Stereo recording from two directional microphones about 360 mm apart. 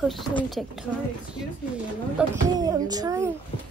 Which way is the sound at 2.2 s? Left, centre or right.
Centre.